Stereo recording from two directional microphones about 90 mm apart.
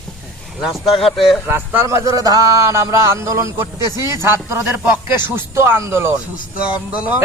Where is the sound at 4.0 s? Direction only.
40° left (ahead or behind).